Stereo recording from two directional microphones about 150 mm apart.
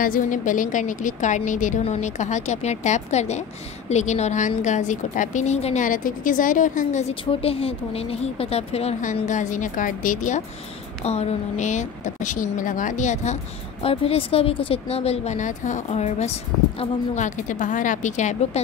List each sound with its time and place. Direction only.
0.0 s a woman's voice: 65° left (ahead or behind); by 5.9 s 45° left (ahead or behind)
5.9 s a woman's voice: 60° left (ahead or behind)
7.2 s speech: 40° left (ahead or behind)
9.0 s a woman's voice: 55° left (ahead or behind)
11.1 s a woman's voice: 45° left (ahead or behind)
13.8 s a woman's voice: 40° left (ahead or behind)